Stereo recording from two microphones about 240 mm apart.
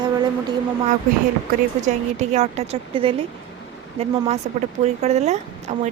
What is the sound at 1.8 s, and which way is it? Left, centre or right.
A woman's voice, right.